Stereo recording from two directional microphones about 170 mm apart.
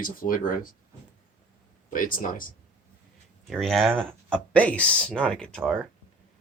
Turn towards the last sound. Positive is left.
turn(degrees=5)  # may be behind; listen again after turning